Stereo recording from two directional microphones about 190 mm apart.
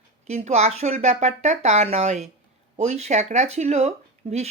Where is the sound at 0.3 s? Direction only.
35° right (ahead or behind).